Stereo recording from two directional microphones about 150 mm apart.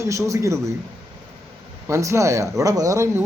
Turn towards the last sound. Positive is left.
turn(degrees=-20)  # may be behind; listen again after turning